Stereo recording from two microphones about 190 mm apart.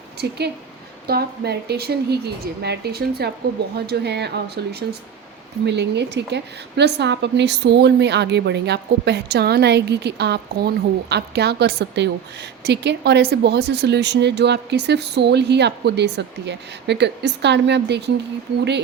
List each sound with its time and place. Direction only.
0.2 s a woman's voice: 60° right (ahead or behind)